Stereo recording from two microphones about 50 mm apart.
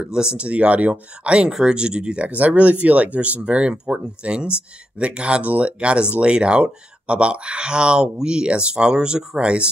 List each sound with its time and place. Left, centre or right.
0.0 s speech: centre
2.2 s speech: right